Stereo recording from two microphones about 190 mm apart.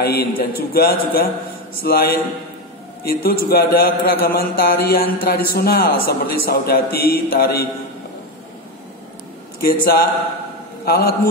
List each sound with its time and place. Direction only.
0.0 s a man's voice: 55° left (ahead or behind)
9.7 s a man's voice: 55° left (ahead or behind)